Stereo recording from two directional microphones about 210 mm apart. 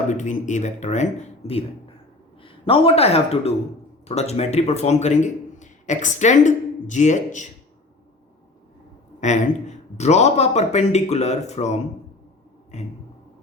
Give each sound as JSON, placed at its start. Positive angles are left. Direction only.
{"t": 0.1, "sound": "a man's voice", "side_deg": 35}
{"t": 9.2, "sound": "speech", "side_deg": 35}